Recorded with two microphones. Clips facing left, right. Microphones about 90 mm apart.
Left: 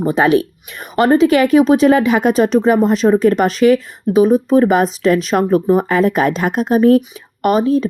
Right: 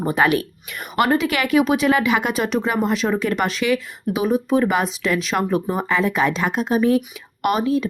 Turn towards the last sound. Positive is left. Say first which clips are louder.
# left 6 dB
turn(degrees=35)  # may be behind; listen again after turning